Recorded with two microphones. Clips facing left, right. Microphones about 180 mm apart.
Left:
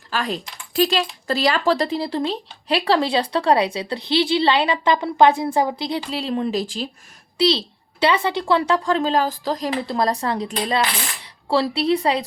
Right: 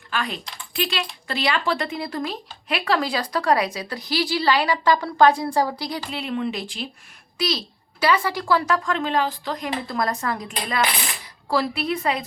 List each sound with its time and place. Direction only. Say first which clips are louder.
0.1 s speech: left 3 dB; 40° left (ahead or behind); by 6.0 s 20° left (ahead or behind)
6.1 s speech: left 2 dB; 35° left (ahead or behind)